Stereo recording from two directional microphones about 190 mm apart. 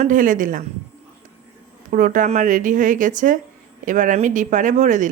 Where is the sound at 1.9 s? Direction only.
40° right (ahead or behind).